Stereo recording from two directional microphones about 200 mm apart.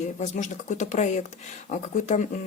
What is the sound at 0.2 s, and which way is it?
Speech, 40° left (ahead or behind).